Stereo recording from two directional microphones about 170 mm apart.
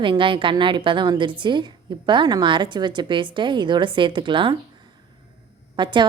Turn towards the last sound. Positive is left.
turn(degrees=-30)  # may be behind; listen again after turning